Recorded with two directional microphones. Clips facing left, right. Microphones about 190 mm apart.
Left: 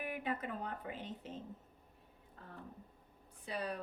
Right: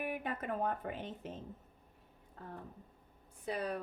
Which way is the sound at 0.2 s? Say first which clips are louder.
Right 3 dB; 55° right (ahead or behind).